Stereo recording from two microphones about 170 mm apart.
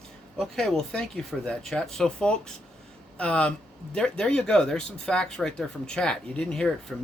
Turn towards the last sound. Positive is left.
turn(degrees=5)  # may be behind; listen again after turning